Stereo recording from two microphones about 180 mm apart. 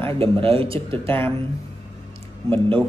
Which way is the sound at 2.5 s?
25° right (ahead or behind).